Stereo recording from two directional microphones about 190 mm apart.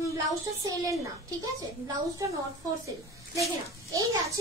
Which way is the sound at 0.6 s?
15° right (ahead or behind).